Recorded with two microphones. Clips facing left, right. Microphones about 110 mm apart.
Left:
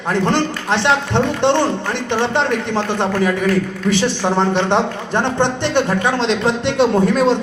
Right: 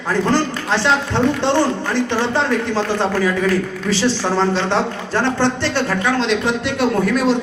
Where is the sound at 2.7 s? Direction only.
20° left (ahead or behind).